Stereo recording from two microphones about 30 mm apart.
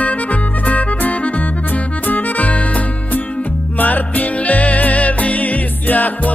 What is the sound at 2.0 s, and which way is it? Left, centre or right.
Music, left.